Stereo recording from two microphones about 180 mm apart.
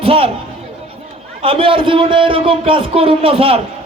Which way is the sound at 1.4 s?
30° right (ahead or behind).